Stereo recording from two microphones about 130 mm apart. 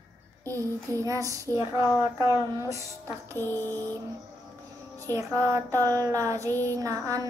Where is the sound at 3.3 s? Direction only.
15° left (ahead or behind).